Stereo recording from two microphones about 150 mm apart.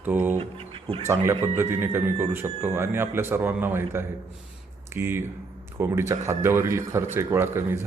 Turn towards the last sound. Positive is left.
turn(degrees=-15)  # may be behind; listen again after turning